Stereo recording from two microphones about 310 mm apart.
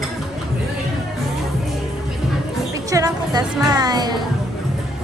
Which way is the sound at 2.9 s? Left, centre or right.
Centre.